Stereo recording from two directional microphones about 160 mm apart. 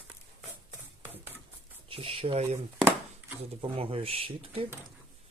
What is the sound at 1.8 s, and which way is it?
Speech, 35° right (ahead or behind).